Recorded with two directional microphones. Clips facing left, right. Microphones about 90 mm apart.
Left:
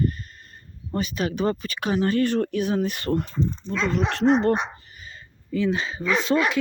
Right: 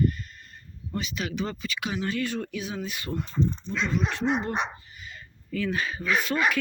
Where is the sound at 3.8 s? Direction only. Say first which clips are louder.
Left 6 dB; 75° left (ahead or behind).